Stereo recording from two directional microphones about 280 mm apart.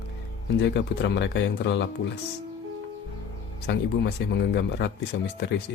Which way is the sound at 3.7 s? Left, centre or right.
Left.